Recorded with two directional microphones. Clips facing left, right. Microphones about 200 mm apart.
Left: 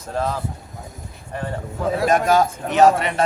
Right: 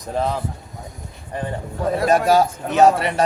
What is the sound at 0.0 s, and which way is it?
Speech, 15° right (ahead or behind).